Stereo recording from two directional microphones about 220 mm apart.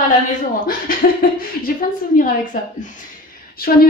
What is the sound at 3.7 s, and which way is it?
Speech, 40° left (ahead or behind).